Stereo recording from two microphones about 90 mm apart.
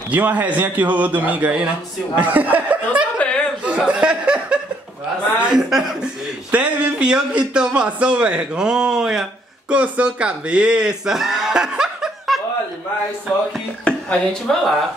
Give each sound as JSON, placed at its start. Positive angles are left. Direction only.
{"t": 0.1, "sound": "a man's voice", "side_deg": -20}
{"t": 3.2, "sound": "chuckle", "side_deg": 10}
{"t": 3.6, "sound": "a man's voice", "side_deg": -15}
{"t": 6.5, "sound": "a man's voice", "side_deg": -15}
{"t": 13.8, "sound": "a woman's voice", "side_deg": 10}